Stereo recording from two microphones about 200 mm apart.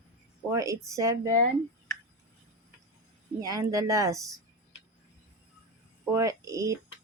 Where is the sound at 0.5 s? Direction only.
15° right (ahead or behind).